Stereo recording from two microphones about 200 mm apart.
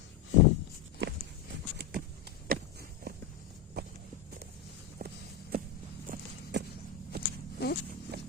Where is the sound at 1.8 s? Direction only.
45° right (ahead or behind).